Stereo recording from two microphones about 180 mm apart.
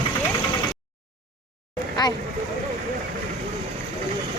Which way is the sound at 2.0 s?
20° left (ahead or behind).